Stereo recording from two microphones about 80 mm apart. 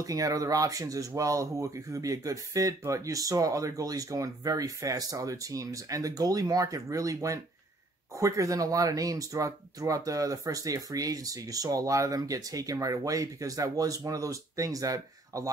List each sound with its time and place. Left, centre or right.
0.0 s speech: right